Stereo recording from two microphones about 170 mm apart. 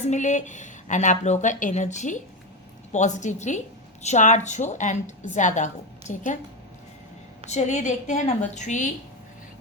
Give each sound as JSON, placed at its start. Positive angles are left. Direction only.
{"t": 0.0, "sound": "a woman's voice", "side_deg": 45}
{"t": 7.4, "sound": "a woman's voice", "side_deg": 40}